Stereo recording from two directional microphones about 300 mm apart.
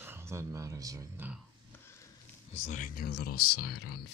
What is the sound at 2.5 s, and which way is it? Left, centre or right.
Speech, left.